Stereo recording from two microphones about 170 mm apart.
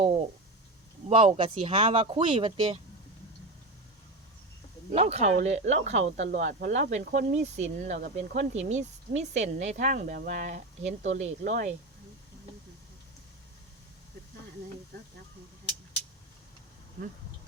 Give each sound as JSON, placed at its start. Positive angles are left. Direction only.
{"t": 1.0, "sound": "speech", "side_deg": -30}
{"t": 4.9, "sound": "speech", "side_deg": -40}